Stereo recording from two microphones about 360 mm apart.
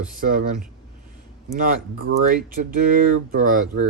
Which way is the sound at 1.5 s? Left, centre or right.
Right.